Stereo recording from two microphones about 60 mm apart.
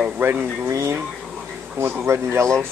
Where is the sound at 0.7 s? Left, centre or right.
Right.